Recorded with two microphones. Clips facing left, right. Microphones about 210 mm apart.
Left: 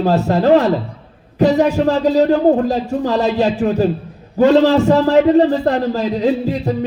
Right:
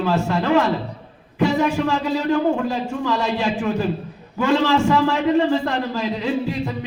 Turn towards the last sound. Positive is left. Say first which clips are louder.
# left 5 dB
turn(degrees=40)  # may be behind; listen again after turning